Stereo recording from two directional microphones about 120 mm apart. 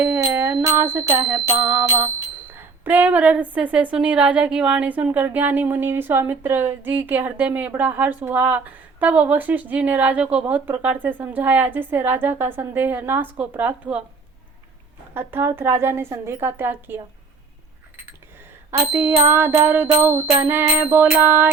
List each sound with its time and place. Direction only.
0.0 s a sound: 20° right (ahead or behind)
0.3 s music: 20° right (ahead or behind)
2.8 s a woman's voice: 15° right (ahead or behind)
15.1 s music: 20° right (ahead or behind)
18.9 s music: 20° right (ahead or behind)